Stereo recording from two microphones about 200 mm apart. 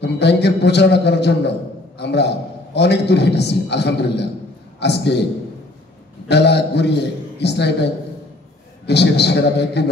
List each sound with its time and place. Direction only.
0.0 s a man's voice: 60° left (ahead or behind)
6.2 s a man's voice: 60° left (ahead or behind)